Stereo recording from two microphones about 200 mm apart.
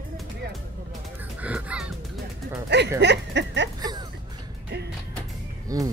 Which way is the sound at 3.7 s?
20° right (ahead or behind).